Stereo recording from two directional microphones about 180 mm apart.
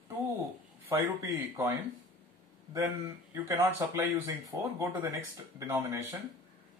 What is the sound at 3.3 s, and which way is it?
Speech, 15° right (ahead or behind).